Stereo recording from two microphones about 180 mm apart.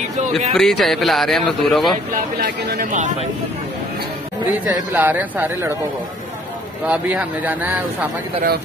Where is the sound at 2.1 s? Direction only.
50° right (ahead or behind).